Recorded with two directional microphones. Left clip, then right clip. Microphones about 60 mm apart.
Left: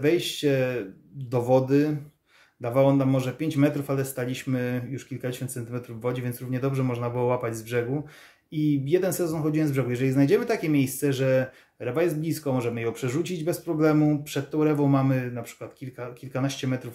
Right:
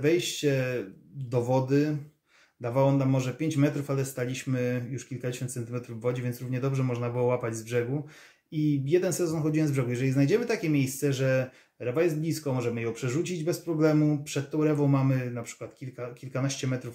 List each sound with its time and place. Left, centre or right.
0.0 s speech: left